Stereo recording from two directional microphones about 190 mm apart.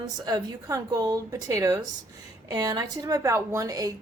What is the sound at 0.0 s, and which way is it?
A woman's voice, 20° right (ahead or behind).